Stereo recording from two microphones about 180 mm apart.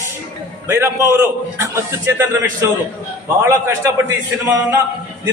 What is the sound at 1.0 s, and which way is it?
A man's voice, 15° right (ahead or behind).